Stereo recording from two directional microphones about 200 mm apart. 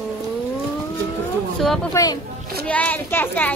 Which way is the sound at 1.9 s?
15° left (ahead or behind).